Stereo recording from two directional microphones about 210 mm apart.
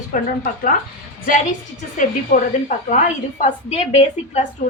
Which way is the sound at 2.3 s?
35° left (ahead or behind).